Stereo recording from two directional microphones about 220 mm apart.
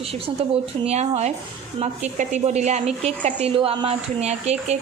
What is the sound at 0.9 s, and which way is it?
A woman's voice, 30° right (ahead or behind).